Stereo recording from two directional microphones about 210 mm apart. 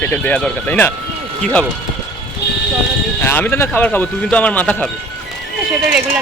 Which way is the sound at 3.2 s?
10° left (ahead or behind).